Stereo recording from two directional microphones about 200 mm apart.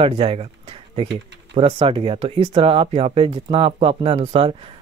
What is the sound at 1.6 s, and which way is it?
Speech, 25° right (ahead or behind).